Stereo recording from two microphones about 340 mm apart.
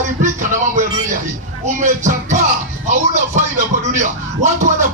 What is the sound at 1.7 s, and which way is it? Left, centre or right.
Speech, right.